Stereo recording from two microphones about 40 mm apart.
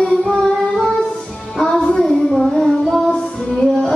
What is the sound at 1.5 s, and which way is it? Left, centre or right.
Music, centre.